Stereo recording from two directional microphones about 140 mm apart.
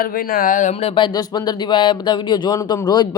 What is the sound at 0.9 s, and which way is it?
Speech, 35° left (ahead or behind).